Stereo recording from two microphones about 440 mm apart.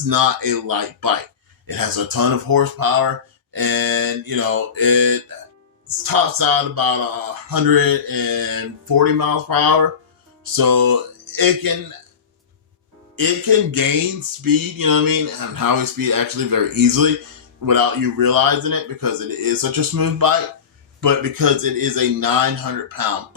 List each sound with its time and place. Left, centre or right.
0.1 s speech: right
10.4 s music: right
13.1 s speech: right